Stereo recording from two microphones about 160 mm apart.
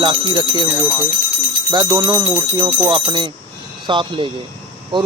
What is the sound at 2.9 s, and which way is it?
Speech, 30° right (ahead or behind).